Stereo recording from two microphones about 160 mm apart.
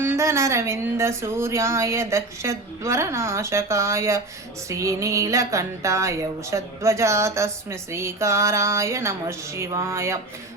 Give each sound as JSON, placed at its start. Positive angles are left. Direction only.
{"t": 0.0, "sound": "speech", "side_deg": -15}